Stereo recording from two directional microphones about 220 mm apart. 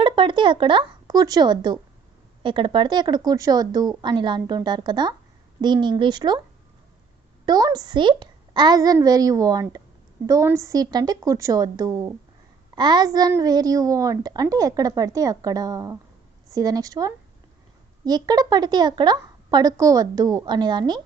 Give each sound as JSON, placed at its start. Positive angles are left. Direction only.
{"t": 0.0, "sound": "a woman's voice", "side_deg": -20}
{"t": 7.4, "sound": "a child's voice", "side_deg": -15}